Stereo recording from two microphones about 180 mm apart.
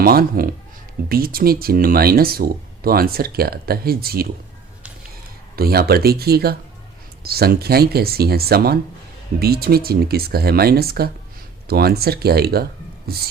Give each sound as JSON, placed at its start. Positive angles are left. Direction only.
{"t": 0.0, "sound": "speech", "side_deg": -55}
{"t": 5.5, "sound": "speech", "side_deg": -60}